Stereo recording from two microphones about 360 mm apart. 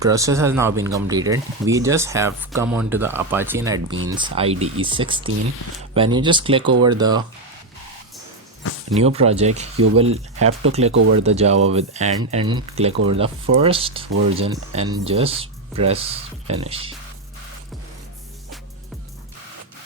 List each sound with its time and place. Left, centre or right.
0.0 s speech: centre
9.0 s speech: centre